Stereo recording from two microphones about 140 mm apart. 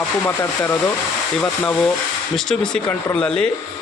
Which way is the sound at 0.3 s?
15° left (ahead or behind).